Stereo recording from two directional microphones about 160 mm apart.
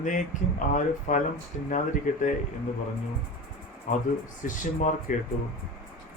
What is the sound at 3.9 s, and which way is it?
Speech, 50° left (ahead or behind).